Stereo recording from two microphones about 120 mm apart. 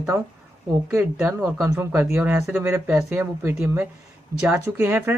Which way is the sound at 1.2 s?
25° right (ahead or behind).